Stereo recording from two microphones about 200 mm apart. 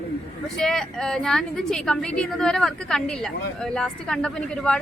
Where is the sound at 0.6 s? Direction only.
Centre (ahead or behind).